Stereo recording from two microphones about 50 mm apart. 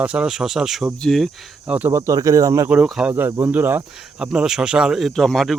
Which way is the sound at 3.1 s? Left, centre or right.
Right.